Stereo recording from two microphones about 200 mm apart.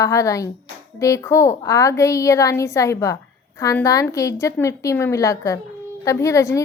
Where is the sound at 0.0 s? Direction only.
15° left (ahead or behind).